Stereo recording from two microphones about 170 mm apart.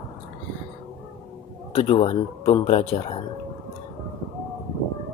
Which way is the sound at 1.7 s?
35° left (ahead or behind).